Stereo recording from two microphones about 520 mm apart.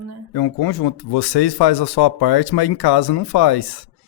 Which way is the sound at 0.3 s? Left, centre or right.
Left.